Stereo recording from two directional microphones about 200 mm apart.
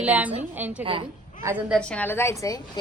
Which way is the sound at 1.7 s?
5° left (ahead or behind).